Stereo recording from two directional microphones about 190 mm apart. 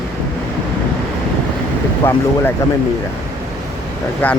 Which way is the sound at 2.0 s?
10° left (ahead or behind).